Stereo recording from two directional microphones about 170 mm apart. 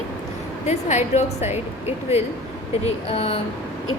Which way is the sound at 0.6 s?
40° left (ahead or behind).